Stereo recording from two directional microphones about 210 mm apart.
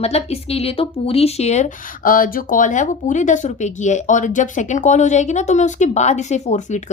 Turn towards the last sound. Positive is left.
turn(degrees=35)  # may be behind; listen again after turning